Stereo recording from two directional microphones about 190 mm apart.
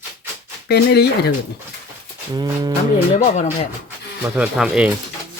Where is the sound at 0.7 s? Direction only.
60° left (ahead or behind).